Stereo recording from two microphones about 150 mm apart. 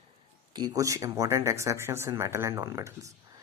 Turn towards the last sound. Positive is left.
turn(degrees=-20)  # may be behind; listen again after turning